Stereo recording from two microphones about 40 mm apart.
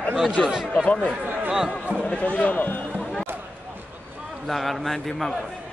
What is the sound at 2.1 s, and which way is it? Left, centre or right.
Speech, left.